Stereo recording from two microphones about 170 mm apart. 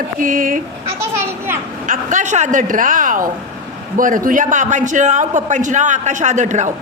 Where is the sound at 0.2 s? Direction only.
55° right (ahead or behind).